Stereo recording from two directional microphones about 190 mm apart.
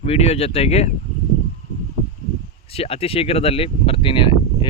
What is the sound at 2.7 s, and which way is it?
Speech, 30° left (ahead or behind).